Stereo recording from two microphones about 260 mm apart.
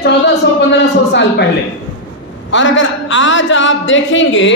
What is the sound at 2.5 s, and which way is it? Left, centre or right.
A man's voice, left.